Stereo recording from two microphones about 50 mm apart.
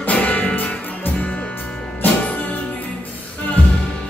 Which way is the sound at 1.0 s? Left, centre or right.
Left.